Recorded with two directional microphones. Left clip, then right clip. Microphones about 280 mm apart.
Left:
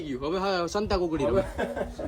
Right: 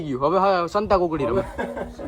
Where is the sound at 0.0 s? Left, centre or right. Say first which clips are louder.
Right 10 dB; centre.